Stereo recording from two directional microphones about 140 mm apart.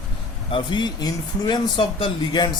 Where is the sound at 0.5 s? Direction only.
30° left (ahead or behind).